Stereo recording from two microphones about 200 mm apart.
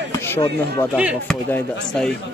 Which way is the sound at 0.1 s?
10° left (ahead or behind).